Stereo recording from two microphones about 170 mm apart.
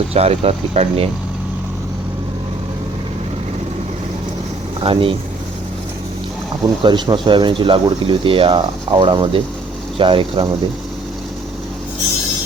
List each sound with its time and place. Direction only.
0.1 s speech: 35° right (ahead or behind)
4.8 s speech: 30° right (ahead or behind)
6.8 s speech: 30° right (ahead or behind)